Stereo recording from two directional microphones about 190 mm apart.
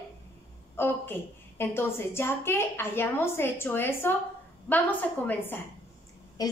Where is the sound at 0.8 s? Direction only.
10° left (ahead or behind).